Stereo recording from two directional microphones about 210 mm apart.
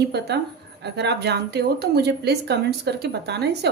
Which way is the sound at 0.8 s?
55° right (ahead or behind).